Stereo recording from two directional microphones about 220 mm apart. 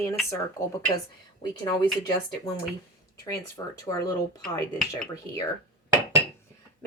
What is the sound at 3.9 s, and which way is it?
Speech, 15° left (ahead or behind).